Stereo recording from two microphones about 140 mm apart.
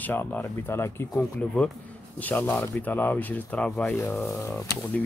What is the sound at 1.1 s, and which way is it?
Speech, 5° left (ahead or behind).